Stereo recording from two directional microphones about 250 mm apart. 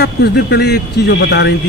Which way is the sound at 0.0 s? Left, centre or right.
Left.